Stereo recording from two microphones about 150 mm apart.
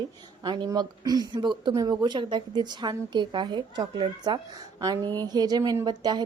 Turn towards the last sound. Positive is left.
turn(degrees=-25)  # may be behind; listen again after turning